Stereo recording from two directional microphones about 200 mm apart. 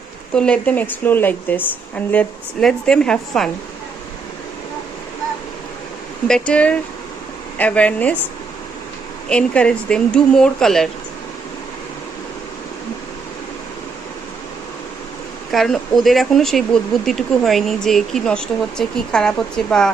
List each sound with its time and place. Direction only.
0.3 s speech: 5° left (ahead or behind)
6.2 s speech: 5° left (ahead or behind)
9.3 s speech: 5° left (ahead or behind)
15.5 s speech: centre (ahead or behind)